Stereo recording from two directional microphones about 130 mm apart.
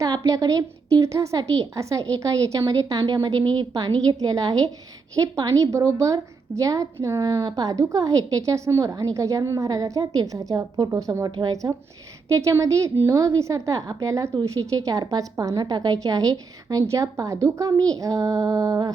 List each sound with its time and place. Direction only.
0.0 s a woman's voice: 25° right (ahead or behind)